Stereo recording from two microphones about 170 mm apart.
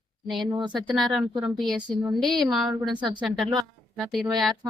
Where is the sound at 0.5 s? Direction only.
25° right (ahead or behind).